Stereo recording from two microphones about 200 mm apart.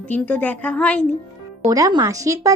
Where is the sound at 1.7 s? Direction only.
15° right (ahead or behind).